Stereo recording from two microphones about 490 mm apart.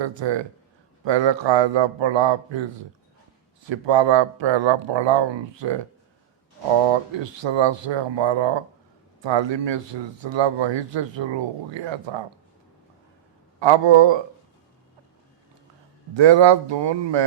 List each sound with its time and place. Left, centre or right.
0.0 s speech: right
6.8 s speech: right
13.6 s speech: right
16.1 s speech: right